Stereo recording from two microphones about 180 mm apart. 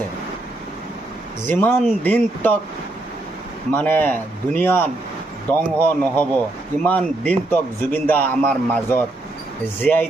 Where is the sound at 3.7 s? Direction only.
10° left (ahead or behind).